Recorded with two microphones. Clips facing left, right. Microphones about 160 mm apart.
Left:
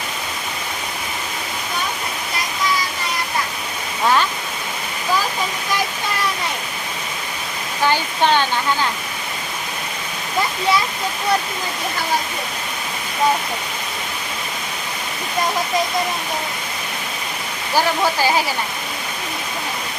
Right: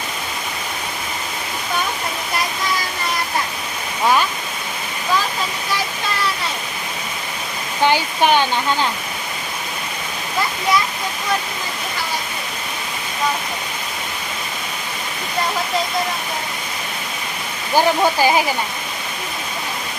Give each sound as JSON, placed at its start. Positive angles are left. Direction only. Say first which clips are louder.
{"t": 7.9, "sound": "speech", "louder": "right 1 dB", "side_deg": -15}
{"t": 17.7, "sound": "speech", "louder": "right 3 dB", "side_deg": -15}